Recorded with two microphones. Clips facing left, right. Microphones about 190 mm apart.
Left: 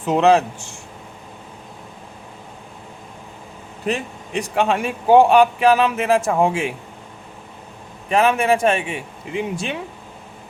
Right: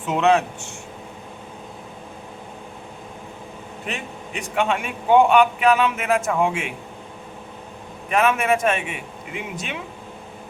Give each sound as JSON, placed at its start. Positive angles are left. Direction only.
{"t": 0.0, "sound": "a man's voice", "side_deg": 35}
{"t": 3.8, "sound": "a man's voice", "side_deg": 35}
{"t": 8.1, "sound": "a man's voice", "side_deg": 30}